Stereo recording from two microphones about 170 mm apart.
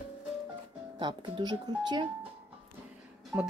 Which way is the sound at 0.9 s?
30° right (ahead or behind).